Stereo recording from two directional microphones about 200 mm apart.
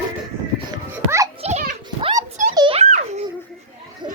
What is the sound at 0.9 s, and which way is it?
Children playing, 15° right (ahead or behind).